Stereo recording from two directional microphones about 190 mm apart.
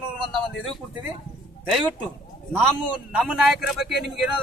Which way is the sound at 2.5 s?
Centre (ahead or behind).